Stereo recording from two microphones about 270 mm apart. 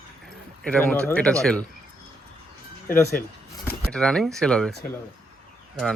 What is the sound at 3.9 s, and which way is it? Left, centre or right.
Speech, centre.